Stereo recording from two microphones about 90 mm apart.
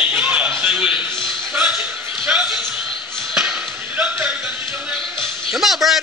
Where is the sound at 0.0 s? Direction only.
15° right (ahead or behind).